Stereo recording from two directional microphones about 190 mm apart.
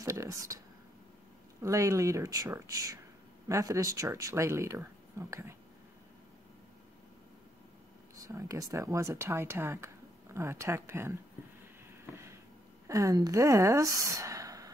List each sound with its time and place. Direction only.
0.0 s speech: 15° right (ahead or behind)
1.6 s speech: 15° right (ahead or behind)
8.2 s speech: 15° right (ahead or behind)
12.8 s speech: 15° right (ahead or behind)